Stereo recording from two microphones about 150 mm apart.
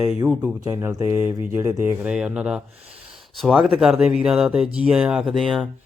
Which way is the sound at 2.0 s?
5° right (ahead or behind).